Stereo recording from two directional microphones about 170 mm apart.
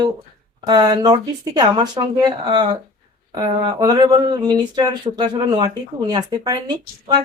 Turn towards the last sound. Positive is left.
turn(degrees=-25)  # may be behind; listen again after turning